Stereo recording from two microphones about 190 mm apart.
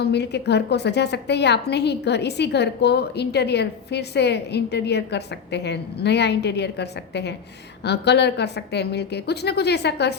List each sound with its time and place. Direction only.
0.0 s a woman's voice: 60° left (ahead or behind)